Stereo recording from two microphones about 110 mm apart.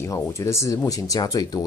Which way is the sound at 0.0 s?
25° left (ahead or behind).